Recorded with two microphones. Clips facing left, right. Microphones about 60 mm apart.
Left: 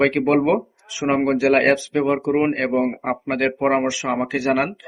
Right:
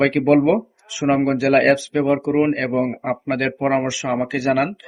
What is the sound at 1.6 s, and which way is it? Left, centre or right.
Speech, centre.